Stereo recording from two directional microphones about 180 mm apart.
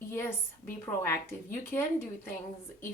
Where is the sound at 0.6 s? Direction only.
15° left (ahead or behind).